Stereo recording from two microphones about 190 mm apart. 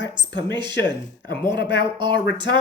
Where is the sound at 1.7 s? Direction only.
25° right (ahead or behind).